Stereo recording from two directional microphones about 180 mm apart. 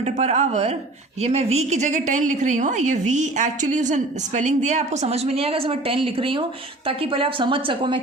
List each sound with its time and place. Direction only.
0.0 s a woman's voice: 35° right (ahead or behind)